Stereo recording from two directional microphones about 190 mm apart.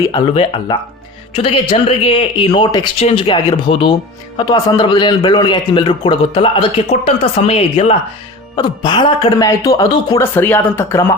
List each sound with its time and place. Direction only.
0.0 s a man's voice: 25° left (ahead or behind)